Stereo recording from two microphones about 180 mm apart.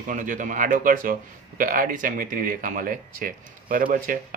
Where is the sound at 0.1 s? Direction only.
45° right (ahead or behind).